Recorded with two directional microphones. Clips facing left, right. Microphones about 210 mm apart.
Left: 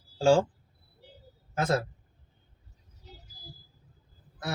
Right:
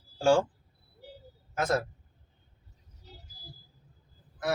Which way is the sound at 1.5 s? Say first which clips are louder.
Left 1 dB; 30° left (ahead or behind).